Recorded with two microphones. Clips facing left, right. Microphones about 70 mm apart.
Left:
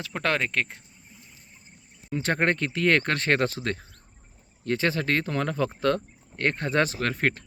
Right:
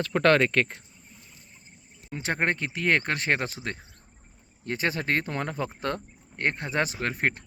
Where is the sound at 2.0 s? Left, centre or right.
Centre.